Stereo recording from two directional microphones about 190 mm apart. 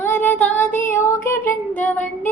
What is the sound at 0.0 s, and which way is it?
Child singing, 10° left (ahead or behind).